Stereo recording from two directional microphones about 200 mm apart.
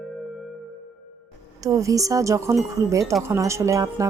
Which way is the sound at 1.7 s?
15° right (ahead or behind).